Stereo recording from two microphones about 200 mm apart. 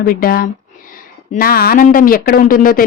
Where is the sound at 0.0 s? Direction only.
45° left (ahead or behind).